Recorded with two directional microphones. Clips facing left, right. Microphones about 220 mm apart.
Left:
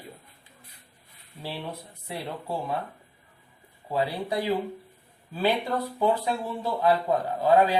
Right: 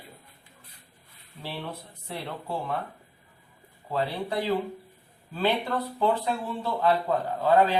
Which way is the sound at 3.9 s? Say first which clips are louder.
Left 1 dB; 15° left (ahead or behind).